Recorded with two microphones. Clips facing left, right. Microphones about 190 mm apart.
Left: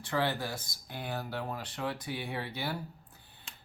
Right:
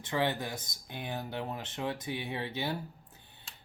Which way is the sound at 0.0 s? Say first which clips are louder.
Even; 20° right (ahead or behind).